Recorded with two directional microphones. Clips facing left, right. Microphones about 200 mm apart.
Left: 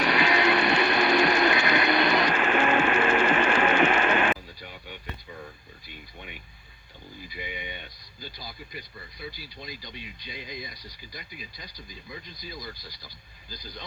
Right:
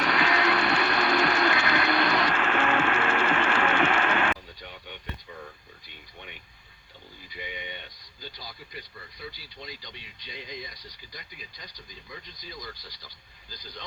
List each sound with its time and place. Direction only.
0.0 s music: 15° left (ahead or behind)
7.3 s speech: 10° left (ahead or behind)